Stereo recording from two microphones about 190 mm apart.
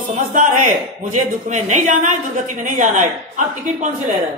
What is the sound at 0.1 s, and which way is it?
A woman's voice, 40° right (ahead or behind).